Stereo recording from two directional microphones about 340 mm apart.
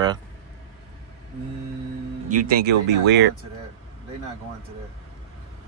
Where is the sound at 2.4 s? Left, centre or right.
Right.